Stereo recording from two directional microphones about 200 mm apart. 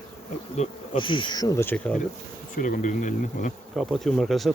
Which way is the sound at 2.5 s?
40° left (ahead or behind).